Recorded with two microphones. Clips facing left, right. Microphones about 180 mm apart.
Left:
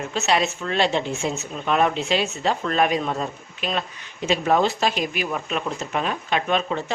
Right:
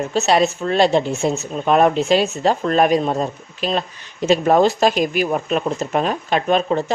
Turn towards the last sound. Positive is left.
turn(degrees=-40)  # may be behind; listen again after turning